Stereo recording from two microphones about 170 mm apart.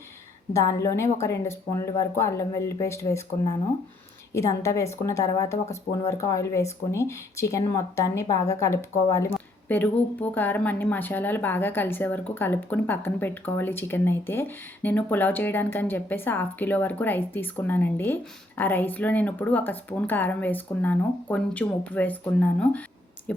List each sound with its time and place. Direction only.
0.5 s speech: 15° left (ahead or behind)
4.4 s speech: 15° left (ahead or behind)